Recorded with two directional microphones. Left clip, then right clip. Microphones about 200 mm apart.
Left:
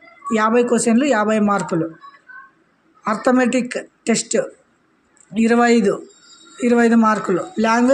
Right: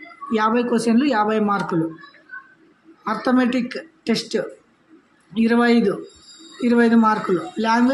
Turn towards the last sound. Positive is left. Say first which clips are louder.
# left 3 dB
turn(degrees=35)  # may be behind; listen again after turning